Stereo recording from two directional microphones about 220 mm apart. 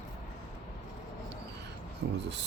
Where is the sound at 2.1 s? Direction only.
50° right (ahead or behind).